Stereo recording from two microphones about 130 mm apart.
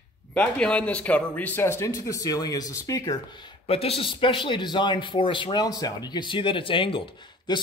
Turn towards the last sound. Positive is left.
turn(degrees=35)  # may be behind; listen again after turning